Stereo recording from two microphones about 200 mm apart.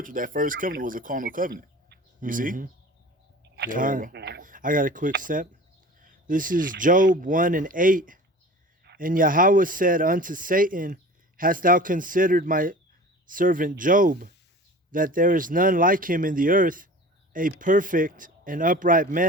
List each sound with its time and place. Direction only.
0.0 s speech: 40° right (ahead or behind)
3.4 s speech: 55° right (ahead or behind)